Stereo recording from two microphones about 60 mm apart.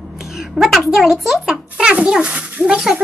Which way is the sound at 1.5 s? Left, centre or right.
Centre.